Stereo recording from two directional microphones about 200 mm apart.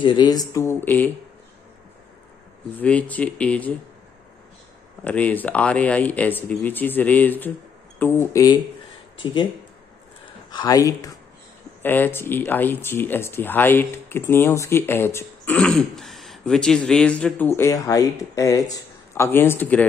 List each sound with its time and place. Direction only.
0.0 s speech: 20° left (ahead or behind)
2.8 s speech: 5° left (ahead or behind)
5.0 s speech: 10° left (ahead or behind); by 9.5 s 25° left (ahead or behind)
10.5 s speech: 20° left (ahead or behind)